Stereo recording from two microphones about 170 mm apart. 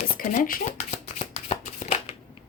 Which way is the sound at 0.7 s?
45° left (ahead or behind).